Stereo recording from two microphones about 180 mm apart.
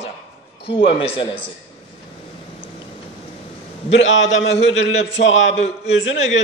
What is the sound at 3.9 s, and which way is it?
A man's voice, 90° left.